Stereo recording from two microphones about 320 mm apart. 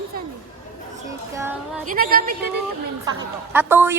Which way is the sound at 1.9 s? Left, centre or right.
Right.